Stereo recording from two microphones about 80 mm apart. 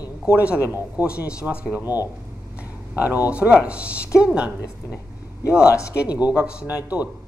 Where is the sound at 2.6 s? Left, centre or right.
Right.